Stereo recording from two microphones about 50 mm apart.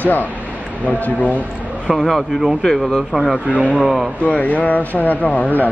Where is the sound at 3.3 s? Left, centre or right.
Right.